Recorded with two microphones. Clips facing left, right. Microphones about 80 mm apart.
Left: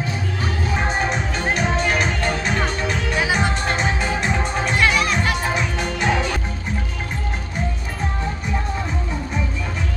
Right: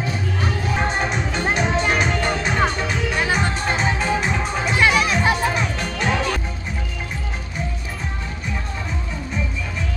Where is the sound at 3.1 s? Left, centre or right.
Centre.